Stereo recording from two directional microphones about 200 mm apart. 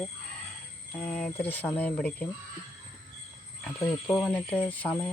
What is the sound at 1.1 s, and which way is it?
Speech, 5° left (ahead or behind).